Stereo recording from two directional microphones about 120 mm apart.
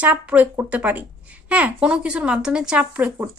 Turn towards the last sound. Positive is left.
turn(degrees=-15)  # may be behind; listen again after turning